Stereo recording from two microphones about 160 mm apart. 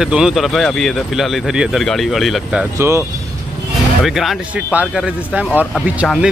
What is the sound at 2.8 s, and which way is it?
Speech, 15° right (ahead or behind).